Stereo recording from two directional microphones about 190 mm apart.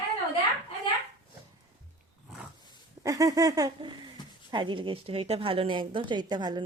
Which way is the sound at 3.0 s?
20° right (ahead or behind).